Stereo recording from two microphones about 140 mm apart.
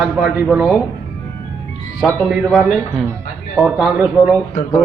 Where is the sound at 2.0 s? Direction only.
Centre (ahead or behind).